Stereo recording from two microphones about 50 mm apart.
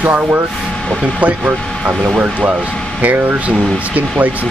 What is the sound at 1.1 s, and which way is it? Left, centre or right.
Speech, right.